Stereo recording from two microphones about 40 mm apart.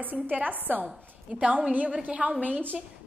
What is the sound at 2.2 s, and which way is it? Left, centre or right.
Speech, right.